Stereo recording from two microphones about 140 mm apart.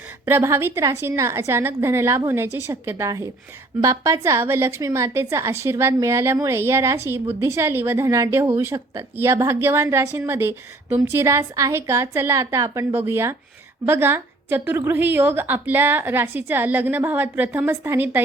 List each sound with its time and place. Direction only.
0.3 s a woman's voice: 15° right (ahead or behind)